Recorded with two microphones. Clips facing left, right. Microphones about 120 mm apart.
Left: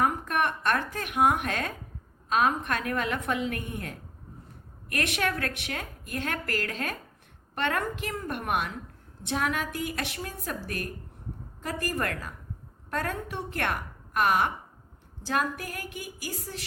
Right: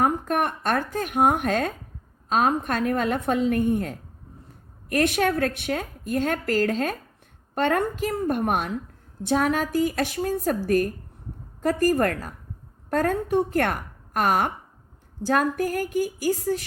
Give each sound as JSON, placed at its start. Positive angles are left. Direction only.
{"t": 0.0, "sound": "a woman's voice", "side_deg": -40}